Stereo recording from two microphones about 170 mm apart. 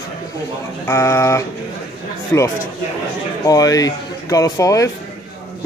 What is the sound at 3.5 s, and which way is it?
Speech, 20° left (ahead or behind).